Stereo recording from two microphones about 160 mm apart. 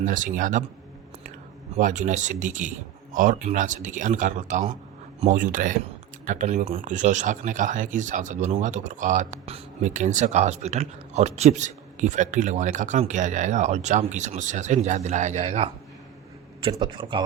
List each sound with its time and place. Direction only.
0.0 s speech: 55° right (ahead or behind)
1.7 s speech: 50° right (ahead or behind)
16.6 s a man's voice: 30° right (ahead or behind)